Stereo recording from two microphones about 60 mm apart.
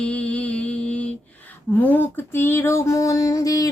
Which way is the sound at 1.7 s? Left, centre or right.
Left.